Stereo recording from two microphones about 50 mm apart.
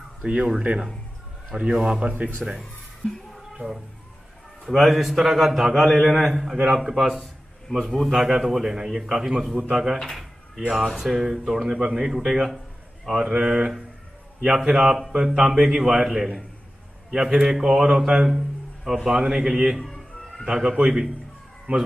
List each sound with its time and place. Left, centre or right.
0.2 s a man's voice: right
2.0 s speech: right
3.5 s a man's voice: centre
5.9 s a man's voice: centre
6.5 s a man's voice: centre
10.0 s drawer open or close: centre
10.7 s a man's voice: centre
15.0 s a man's voice: centre
19.9 s music: centre
20.4 s a man's voice: centre
21.7 s speech: right